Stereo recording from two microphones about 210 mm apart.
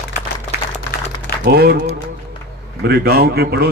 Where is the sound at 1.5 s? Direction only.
50° right (ahead or behind).